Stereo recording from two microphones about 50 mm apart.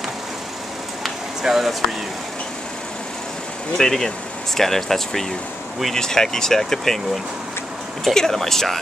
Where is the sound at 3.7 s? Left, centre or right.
Centre.